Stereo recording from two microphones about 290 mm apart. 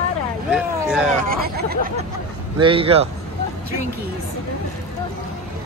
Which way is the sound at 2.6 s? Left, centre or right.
Centre.